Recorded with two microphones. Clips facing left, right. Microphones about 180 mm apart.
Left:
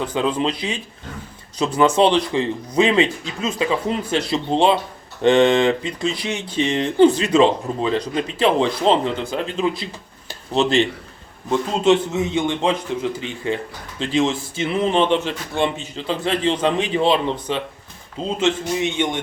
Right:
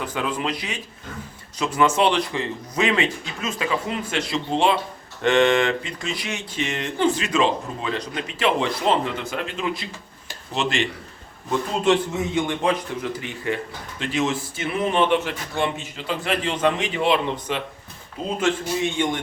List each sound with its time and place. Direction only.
0.0 s speech: 30° left (ahead or behind)
10.2 s a sound: 35° left (ahead or behind)
11.9 s speech: 25° left (ahead or behind)